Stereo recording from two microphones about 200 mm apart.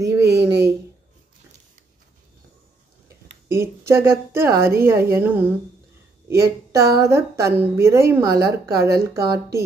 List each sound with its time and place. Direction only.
0.2 s a woman's voice: 55° right (ahead or behind)
3.4 s a woman's voice: 15° right (ahead or behind)